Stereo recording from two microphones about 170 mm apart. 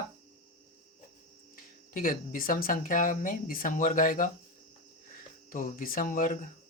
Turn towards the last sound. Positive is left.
turn(degrees=50)  # may be behind; listen again after turning